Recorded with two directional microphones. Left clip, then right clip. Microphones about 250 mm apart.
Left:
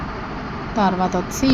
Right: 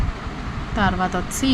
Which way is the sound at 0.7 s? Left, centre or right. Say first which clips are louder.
Left 2 dB; centre.